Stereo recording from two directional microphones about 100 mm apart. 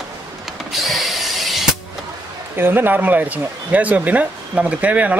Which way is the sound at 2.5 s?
20° right (ahead or behind).